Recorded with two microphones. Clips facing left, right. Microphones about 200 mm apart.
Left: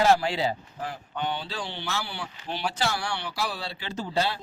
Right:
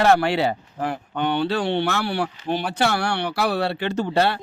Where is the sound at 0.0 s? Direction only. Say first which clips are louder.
Right 4 dB; 65° right (ahead or behind).